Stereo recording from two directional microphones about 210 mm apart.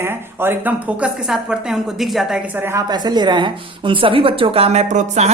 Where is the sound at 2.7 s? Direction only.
20° right (ahead or behind); by 5.3 s 35° right (ahead or behind).